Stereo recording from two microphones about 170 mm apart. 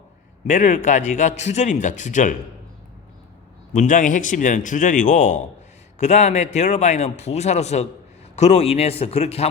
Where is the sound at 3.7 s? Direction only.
50° left (ahead or behind).